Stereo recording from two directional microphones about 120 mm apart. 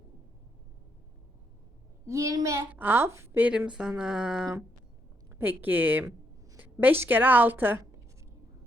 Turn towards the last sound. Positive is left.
turn(degrees=-15)  # may be behind; listen again after turning